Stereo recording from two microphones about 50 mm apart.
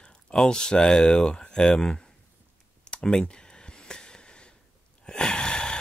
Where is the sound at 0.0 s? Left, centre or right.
Centre.